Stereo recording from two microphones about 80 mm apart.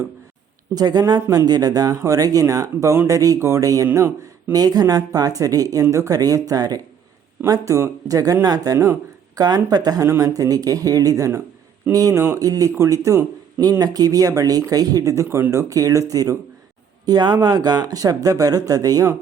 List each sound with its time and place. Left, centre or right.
0.7 s speech: right
4.5 s speech: right
7.4 s speech: right
17.1 s speech: right